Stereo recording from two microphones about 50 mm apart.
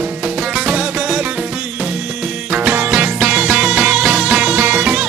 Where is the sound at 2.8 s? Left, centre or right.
Right.